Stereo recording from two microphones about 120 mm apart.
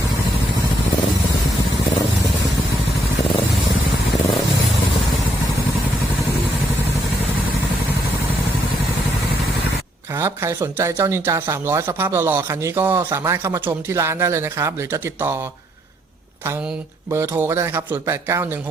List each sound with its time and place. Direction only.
10.2 s speech: 20° right (ahead or behind)
17.1 s speech: 20° right (ahead or behind)